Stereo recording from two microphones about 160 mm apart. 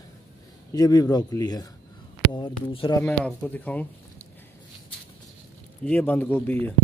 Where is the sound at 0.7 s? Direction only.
25° left (ahead or behind).